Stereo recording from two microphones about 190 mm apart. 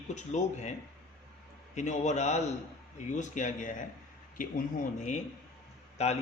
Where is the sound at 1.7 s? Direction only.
40° left (ahead or behind).